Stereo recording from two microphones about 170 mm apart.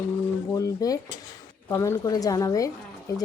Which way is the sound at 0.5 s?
20° left (ahead or behind).